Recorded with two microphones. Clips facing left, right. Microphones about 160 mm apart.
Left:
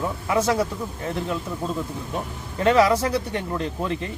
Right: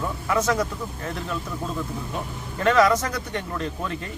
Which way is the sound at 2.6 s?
30° left (ahead or behind).